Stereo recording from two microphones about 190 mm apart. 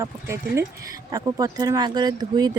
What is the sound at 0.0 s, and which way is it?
Speech, 15° right (ahead or behind).